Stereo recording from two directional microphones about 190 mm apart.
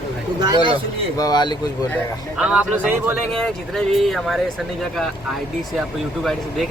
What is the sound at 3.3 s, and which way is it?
Speech, 5° left (ahead or behind).